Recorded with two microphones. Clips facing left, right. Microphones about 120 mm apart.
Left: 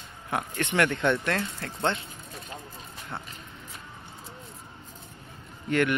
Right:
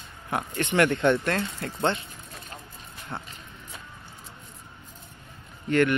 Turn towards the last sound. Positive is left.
turn(degrees=10)  # may be behind; listen again after turning